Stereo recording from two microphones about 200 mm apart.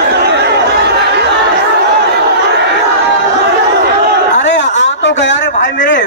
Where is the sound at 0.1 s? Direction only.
55° right (ahead or behind).